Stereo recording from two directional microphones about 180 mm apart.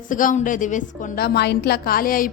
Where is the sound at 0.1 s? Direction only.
45° left (ahead or behind).